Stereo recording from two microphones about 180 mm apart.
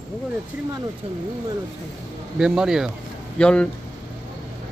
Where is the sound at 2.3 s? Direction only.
5° right (ahead or behind).